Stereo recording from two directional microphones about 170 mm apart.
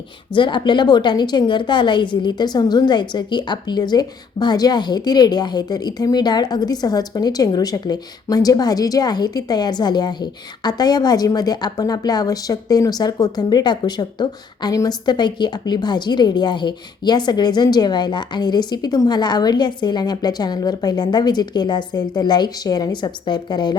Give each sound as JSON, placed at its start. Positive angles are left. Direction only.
{"t": 0.3, "sound": "a woman's voice", "side_deg": 25}